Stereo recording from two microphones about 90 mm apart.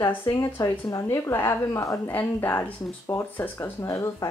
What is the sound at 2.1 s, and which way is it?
A woman's voice, 20° left (ahead or behind).